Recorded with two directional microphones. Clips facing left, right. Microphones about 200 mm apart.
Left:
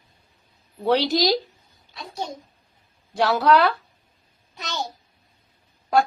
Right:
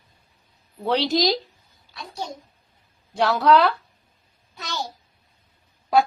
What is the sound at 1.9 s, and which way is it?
Speech, 20° left (ahead or behind).